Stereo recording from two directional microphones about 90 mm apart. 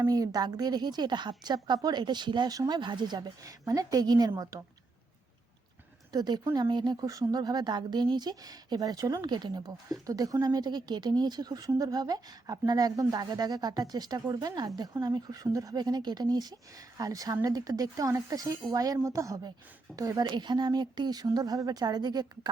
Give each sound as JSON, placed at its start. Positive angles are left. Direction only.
{"t": 0.1, "sound": "speech", "side_deg": -45}
{"t": 3.4, "sound": "speech", "side_deg": -40}
{"t": 6.1, "sound": "speech", "side_deg": -50}
{"t": 7.0, "sound": "speech", "side_deg": -40}
{"t": 20.2, "sound": "speech", "side_deg": -55}